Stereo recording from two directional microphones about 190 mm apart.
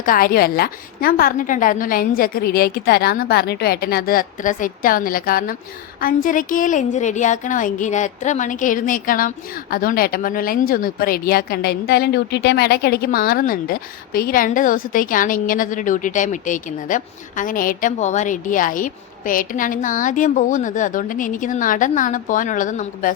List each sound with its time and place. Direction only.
0.0 s speech: 50° left (ahead or behind)